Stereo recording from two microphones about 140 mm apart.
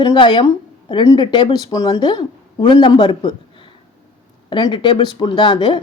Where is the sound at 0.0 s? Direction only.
35° left (ahead or behind).